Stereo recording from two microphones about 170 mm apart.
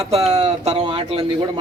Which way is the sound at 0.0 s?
40° right (ahead or behind).